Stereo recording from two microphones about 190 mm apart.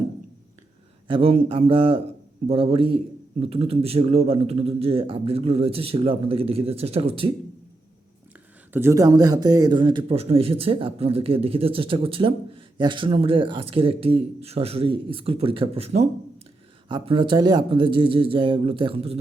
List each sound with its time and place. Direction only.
1.0 s a man's voice: 25° right (ahead or behind)
8.7 s speech: 15° right (ahead or behind); by 19.2 s 30° right (ahead or behind)